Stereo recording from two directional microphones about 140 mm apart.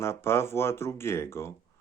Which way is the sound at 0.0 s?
20° left (ahead or behind).